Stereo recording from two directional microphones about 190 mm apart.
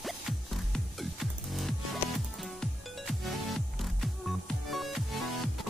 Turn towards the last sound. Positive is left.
turn(degrees=0)  # may be behind; listen again after turning